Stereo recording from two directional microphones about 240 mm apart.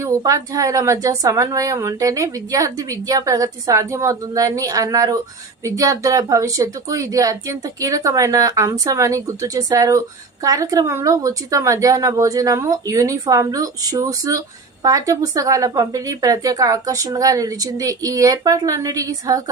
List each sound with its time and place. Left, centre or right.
0.0 s speech: centre